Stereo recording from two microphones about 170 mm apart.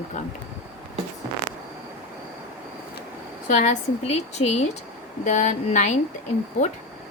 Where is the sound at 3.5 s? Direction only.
45° left (ahead or behind).